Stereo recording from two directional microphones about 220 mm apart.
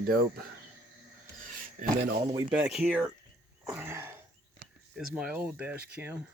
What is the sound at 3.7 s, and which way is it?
Throat clearing, 10° right (ahead or behind).